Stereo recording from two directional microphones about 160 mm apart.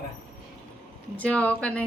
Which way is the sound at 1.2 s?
10° left (ahead or behind).